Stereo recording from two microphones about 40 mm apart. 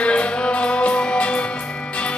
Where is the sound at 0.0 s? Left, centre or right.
Left.